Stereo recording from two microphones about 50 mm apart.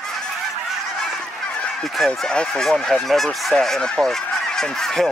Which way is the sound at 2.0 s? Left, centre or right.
Centre.